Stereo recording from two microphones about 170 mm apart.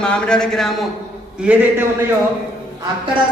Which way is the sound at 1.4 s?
10° right (ahead or behind).